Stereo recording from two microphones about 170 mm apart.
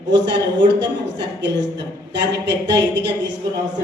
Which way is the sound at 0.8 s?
90° right.